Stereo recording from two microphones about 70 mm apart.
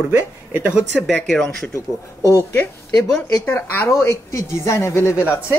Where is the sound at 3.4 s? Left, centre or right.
Left.